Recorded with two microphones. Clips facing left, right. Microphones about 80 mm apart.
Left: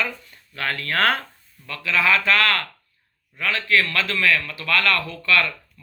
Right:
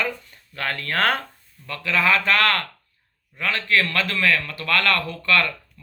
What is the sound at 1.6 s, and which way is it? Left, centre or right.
Speech, right.